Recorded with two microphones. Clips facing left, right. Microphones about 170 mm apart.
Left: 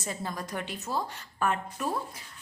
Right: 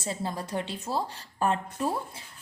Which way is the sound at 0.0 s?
30° right (ahead or behind).